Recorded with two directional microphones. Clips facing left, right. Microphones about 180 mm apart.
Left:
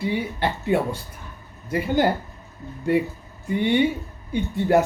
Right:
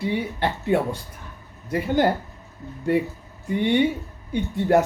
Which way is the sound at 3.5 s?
5° left (ahead or behind).